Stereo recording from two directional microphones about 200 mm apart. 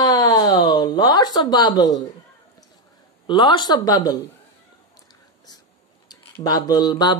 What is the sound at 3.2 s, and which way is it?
Mantra, 25° left (ahead or behind).